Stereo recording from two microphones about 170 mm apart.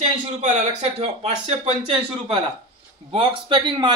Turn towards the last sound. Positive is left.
turn(degrees=-25)  # may be behind; listen again after turning